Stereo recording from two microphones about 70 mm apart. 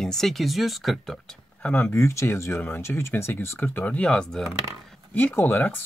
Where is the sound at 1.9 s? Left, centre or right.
Left.